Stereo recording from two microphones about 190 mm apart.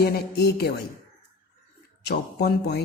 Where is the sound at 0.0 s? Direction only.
60° left (ahead or behind).